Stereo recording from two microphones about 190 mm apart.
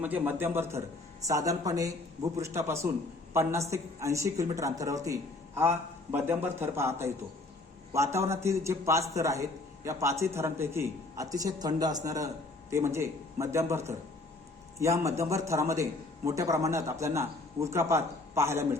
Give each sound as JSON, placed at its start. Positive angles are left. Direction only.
{"t": 0.0, "sound": "a man's voice", "side_deg": -10}